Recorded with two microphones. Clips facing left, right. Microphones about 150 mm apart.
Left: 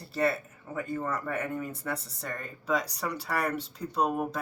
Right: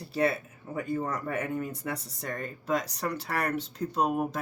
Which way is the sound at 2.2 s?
Centre (ahead or behind).